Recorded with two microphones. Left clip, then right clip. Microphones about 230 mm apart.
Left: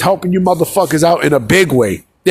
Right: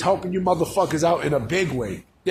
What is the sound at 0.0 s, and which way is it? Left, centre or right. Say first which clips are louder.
A man's voice: left 8 dB; left.